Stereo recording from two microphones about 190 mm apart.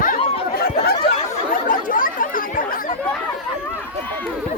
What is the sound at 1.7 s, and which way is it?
Chatter, 45° left (ahead or behind).